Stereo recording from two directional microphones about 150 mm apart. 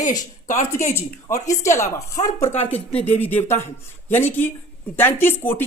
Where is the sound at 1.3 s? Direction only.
50° left (ahead or behind).